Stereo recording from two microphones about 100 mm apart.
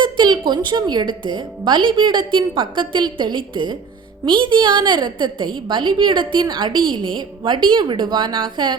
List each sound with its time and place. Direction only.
0.0 s a woman's voice: 50° right (ahead or behind)